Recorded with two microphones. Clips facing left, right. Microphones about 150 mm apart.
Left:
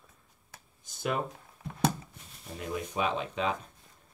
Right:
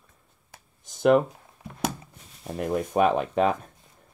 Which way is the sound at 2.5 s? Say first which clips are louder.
Right 10 dB; 55° right (ahead or behind).